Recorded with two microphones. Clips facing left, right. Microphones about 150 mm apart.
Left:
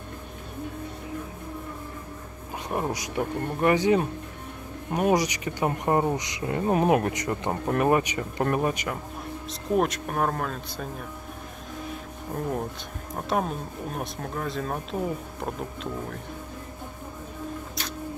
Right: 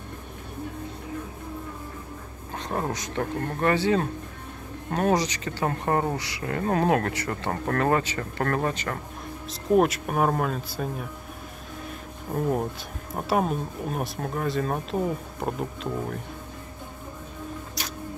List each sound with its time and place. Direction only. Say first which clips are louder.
2.7 s speech: left 1 dB; 10° left (ahead or behind)
9.5 s speech: right 4 dB; 5° right (ahead or behind)
13.1 s speech: right 3 dB; 5° right (ahead or behind)